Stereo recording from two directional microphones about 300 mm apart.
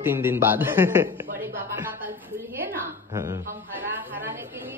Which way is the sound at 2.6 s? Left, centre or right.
Centre.